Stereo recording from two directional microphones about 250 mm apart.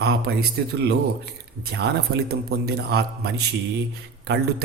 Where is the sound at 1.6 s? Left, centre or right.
Right.